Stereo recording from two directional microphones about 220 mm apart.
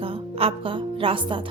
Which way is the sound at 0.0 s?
25° right (ahead or behind).